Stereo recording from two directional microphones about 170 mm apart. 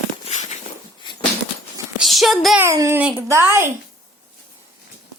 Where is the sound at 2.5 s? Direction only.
15° right (ahead or behind).